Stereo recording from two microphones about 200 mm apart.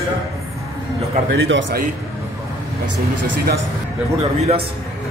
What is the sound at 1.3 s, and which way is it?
Speech, 65° right (ahead or behind).